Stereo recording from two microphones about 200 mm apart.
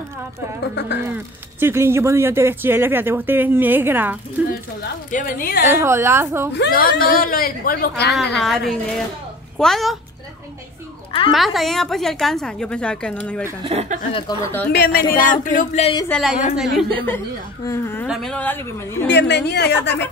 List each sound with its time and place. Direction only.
1.0 s speech: 10° right (ahead or behind)
4.5 s a woman's voice: 45° left (ahead or behind)
5.7 s speech: 10° right (ahead or behind)
6.5 s a woman's voice: 55° left (ahead or behind)
8.1 s a woman's voice: centre (ahead or behind)
11.1 s a child's voice: 25° left (ahead or behind)
11.3 s a woman's voice: centre (ahead or behind)
13.7 s a woman's voice: 30° right (ahead or behind)
14.7 s a woman's voice: 50° left (ahead or behind)
15.1 s a sound: 40° left (ahead or behind)
16.1 s a woman's voice: centre (ahead or behind)
17.6 s speech: 15° left (ahead or behind)
18.0 s speech: centre (ahead or behind)
19.0 s a woman's voice: 60° left (ahead or behind)